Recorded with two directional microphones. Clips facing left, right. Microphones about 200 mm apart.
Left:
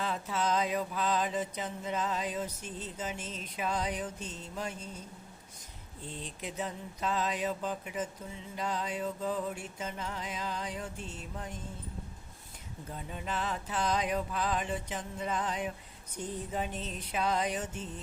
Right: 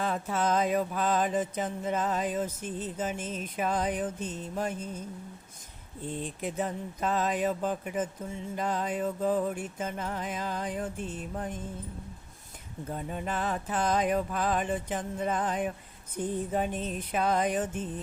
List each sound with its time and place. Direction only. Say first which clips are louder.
0.0 s mantra: right 4 dB; 50° right (ahead or behind)
6.1 s mantra: right 7 dB; 50° right (ahead or behind)
12.9 s mantra: right 5 dB; 50° right (ahead or behind)